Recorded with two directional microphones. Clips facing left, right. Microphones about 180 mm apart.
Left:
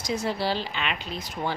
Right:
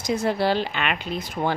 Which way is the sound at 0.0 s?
55° right (ahead or behind).